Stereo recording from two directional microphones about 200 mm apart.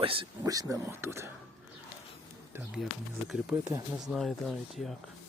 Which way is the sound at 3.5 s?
15° right (ahead or behind).